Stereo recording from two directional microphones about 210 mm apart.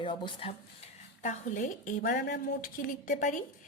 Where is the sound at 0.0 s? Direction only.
25° left (ahead or behind).